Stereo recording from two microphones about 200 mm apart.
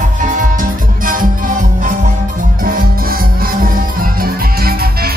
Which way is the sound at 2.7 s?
45° right (ahead or behind).